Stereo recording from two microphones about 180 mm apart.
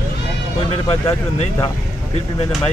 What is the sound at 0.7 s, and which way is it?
Speech, 35° left (ahead or behind).